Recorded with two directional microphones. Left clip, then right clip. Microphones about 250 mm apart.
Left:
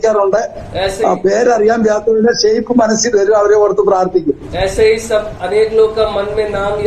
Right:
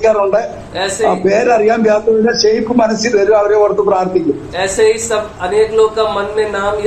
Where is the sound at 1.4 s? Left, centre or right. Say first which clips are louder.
Left 1 dB; left.